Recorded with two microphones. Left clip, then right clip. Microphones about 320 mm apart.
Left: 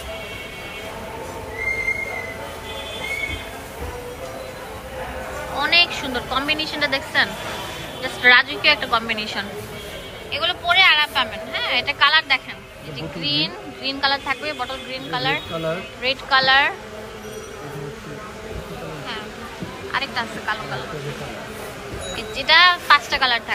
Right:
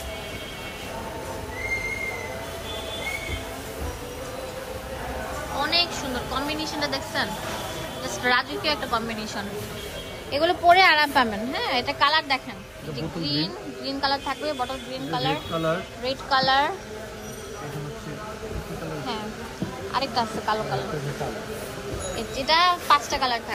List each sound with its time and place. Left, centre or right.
5.6 s a woman's voice: centre
10.3 s speech: centre
19.9 s speech: centre
22.1 s a woman's voice: centre